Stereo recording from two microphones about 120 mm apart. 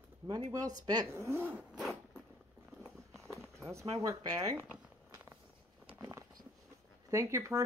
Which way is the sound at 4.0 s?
30° right (ahead or behind).